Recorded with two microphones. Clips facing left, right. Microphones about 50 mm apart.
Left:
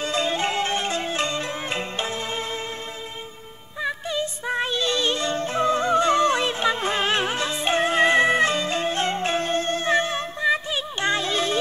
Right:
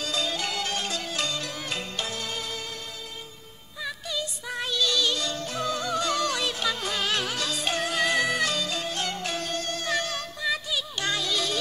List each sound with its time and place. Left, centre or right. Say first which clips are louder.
0.0 s music: left 6 dB; left
3.8 s music: left 6 dB; left